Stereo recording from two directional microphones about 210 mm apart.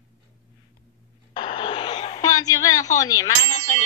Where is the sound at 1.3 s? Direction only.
25° left (ahead or behind).